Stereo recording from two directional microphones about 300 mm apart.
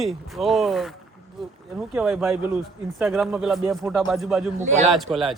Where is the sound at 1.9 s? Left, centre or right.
Centre.